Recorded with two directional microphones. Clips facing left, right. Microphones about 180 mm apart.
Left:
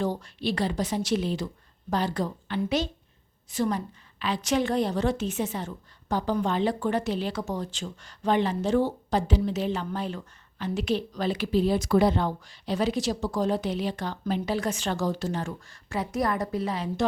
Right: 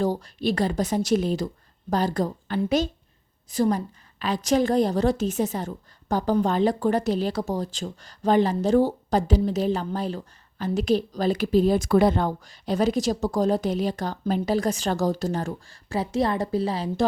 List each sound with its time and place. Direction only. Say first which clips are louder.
0.0 s a woman's voice: right 4 dB; 35° right (ahead or behind)